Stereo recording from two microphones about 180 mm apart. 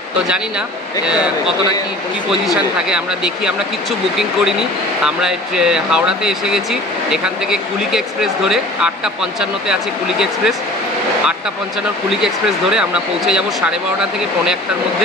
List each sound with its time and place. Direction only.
2.4 s speech: centre (ahead or behind)
4.2 s speech: 5° right (ahead or behind)
12.1 s speech: centre (ahead or behind)